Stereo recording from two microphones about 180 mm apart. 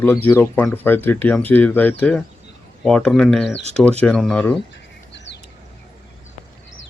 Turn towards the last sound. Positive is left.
turn(degrees=75)  # may be behind; listen again after turning